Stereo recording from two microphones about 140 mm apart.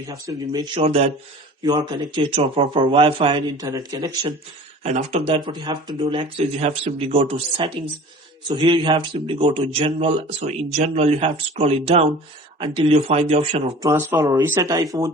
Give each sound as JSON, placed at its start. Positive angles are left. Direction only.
{"t": 0.1, "sound": "speech", "side_deg": -30}
{"t": 1.6, "sound": "speech", "side_deg": -30}
{"t": 3.6, "sound": "speech", "side_deg": -25}
{"t": 4.8, "sound": "speech", "side_deg": -50}
{"t": 13.9, "sound": "speech", "side_deg": -15}